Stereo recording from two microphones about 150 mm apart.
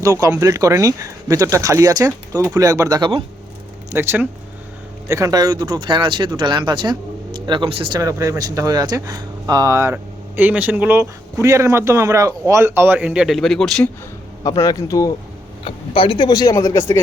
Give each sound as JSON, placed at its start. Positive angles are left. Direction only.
{"t": 0.0, "sound": "speech", "side_deg": -20}
{"t": 3.0, "sound": "speech", "side_deg": -35}
{"t": 3.9, "sound": "speech", "side_deg": -15}
{"t": 7.9, "sound": "speech", "side_deg": -20}
{"t": 14.6, "sound": "speech", "side_deg": 20}
{"t": 15.6, "sound": "speech", "side_deg": 35}